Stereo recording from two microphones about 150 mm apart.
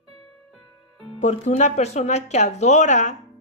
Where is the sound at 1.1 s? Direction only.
50° left (ahead or behind).